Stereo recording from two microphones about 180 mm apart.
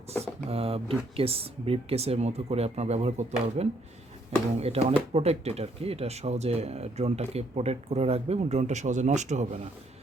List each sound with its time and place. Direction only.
0.2 s speech: 30° right (ahead or behind)